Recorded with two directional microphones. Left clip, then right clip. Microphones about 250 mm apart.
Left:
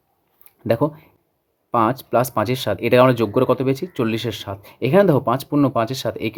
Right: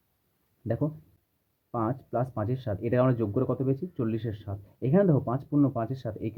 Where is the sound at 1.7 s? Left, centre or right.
Left.